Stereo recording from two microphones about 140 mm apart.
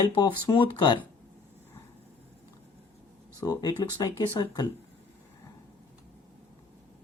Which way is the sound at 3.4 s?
25° left (ahead or behind).